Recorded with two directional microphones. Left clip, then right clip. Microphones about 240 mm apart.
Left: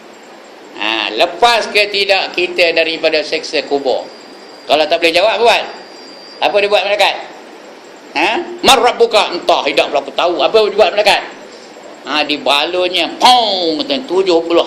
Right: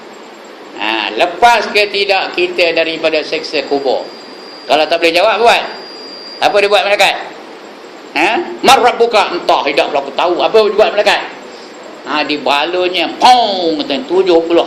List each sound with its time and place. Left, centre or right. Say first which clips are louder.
0.8 s a man's voice: even; centre